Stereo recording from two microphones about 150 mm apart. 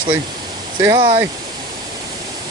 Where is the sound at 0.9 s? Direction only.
35° right (ahead or behind).